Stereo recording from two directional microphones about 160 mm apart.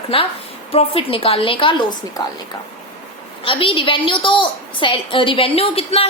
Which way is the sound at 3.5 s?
35° left (ahead or behind).